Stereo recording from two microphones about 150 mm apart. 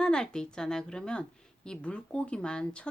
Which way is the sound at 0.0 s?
5° left (ahead or behind).